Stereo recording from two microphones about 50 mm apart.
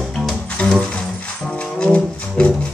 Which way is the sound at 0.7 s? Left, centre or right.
Centre.